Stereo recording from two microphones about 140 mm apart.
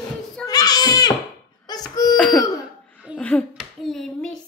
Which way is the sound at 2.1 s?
5° left (ahead or behind).